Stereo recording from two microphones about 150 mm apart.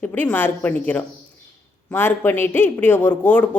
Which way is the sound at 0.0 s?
10° left (ahead or behind).